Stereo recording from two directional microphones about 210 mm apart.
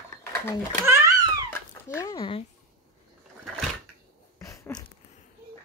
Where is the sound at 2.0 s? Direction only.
20° left (ahead or behind).